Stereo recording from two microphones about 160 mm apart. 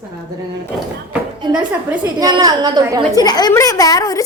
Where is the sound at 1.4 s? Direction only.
25° right (ahead or behind).